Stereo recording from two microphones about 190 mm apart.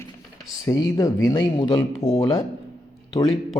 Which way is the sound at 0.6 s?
20° left (ahead or behind).